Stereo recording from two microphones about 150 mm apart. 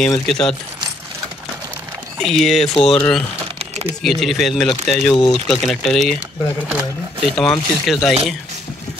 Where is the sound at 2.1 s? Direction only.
Centre (ahead or behind).